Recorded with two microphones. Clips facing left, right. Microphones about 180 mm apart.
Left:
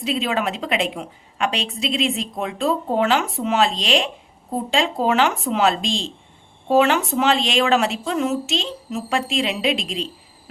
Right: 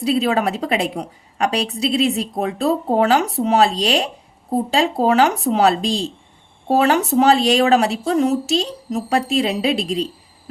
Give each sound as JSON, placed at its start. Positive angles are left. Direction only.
{"t": 0.0, "sound": "a woman's voice", "side_deg": -35}